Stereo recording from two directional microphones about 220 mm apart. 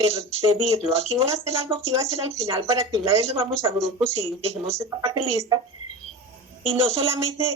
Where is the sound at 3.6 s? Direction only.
15° right (ahead or behind).